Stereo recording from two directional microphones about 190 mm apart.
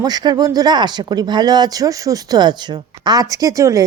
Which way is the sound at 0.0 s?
20° right (ahead or behind).